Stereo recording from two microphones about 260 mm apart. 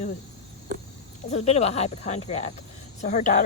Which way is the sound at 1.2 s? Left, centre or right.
Left.